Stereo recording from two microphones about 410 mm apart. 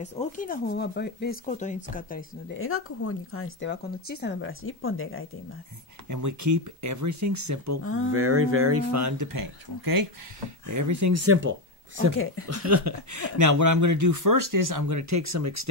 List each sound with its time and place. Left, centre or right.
0.0 s speech: centre
6.0 s speech: right
7.8 s speech: left
8.1 s speech: right
10.7 s speech: right
12.4 s speech: right